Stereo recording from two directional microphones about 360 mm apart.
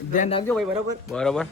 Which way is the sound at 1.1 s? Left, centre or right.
Centre.